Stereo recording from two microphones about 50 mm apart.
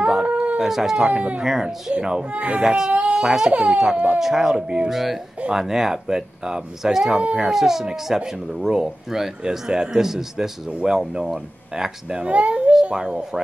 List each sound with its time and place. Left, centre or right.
0.0 s howl: right
0.6 s speech: centre
1.0 s speech: right
1.4 s speech: centre
2.3 s speech: right
2.6 s speech: centre
2.9 s speech: right
3.2 s speech: centre
12.3 s babbling: right
12.9 s speech: centre